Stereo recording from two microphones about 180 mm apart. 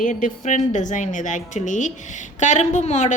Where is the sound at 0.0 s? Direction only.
45° left (ahead or behind).